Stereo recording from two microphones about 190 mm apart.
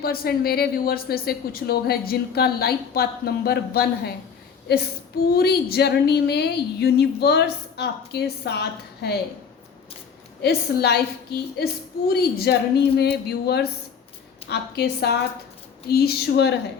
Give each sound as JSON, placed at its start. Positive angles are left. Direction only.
{"t": 0.0, "sound": "speech", "side_deg": 55}
{"t": 10.4, "sound": "speech", "side_deg": 60}